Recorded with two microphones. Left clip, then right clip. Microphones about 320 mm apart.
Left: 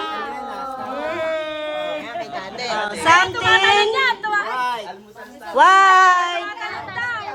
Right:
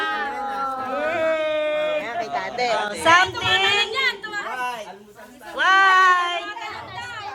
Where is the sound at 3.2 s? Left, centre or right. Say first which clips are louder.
Left 5 dB; left.